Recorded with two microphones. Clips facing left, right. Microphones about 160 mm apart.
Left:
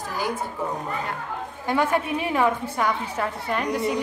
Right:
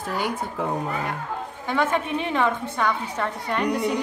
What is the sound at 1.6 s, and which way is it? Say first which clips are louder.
A woman's voice: left 1 dB; 10° left (ahead or behind).